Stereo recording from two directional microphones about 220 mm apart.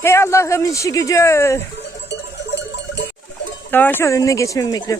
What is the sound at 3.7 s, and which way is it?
A man's voice, 10° left (ahead or behind).